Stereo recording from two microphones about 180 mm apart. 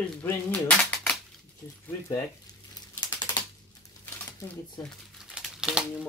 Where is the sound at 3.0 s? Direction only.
25° left (ahead or behind).